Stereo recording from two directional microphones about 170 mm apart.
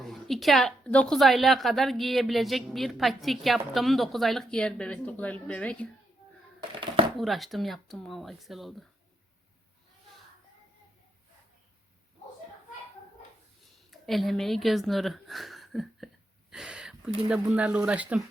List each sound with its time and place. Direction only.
0.0 s a woman's voice: centre (ahead or behind)
6.6 s a sound: 30° right (ahead or behind)
7.2 s a woman's voice: centre (ahead or behind)
13.9 s speech: centre (ahead or behind)